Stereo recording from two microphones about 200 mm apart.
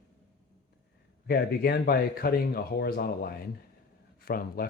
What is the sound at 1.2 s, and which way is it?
Speech, 50° left (ahead or behind).